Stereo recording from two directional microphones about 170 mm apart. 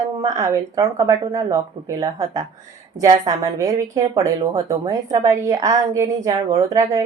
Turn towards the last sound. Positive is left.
turn(degrees=-20)  # may be behind; listen again after turning